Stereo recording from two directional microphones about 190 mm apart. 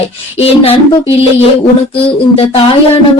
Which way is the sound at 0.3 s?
30° left (ahead or behind).